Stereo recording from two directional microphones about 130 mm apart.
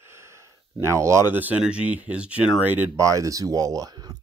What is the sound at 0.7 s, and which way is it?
Speech, 20° right (ahead or behind).